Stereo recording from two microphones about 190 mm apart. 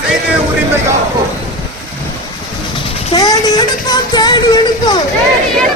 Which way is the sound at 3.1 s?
20° left (ahead or behind).